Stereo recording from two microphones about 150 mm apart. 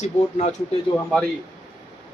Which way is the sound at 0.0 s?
45° left (ahead or behind).